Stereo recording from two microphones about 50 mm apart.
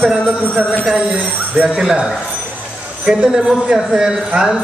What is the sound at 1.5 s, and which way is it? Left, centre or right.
Speech, right.